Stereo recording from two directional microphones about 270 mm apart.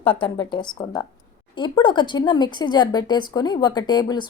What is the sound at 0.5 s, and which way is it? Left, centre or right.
A woman's voice, centre.